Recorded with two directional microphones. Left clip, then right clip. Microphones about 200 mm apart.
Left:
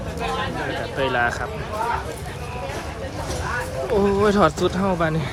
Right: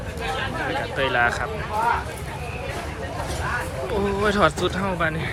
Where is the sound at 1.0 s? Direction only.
20° left (ahead or behind).